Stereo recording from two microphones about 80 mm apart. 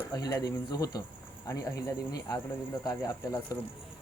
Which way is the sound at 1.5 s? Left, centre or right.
Left.